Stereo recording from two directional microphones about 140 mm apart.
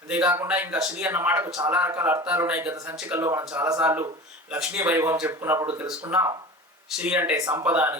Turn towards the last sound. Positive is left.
turn(degrees=-10)  # may be behind; listen again after turning